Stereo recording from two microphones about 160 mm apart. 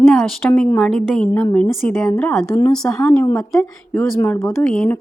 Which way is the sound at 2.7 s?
5° left (ahead or behind).